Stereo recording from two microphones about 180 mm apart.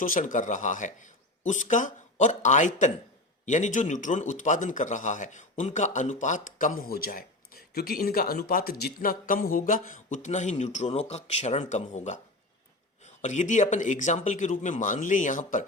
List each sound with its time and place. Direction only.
0.0 s a man's voice: 45° left (ahead or behind)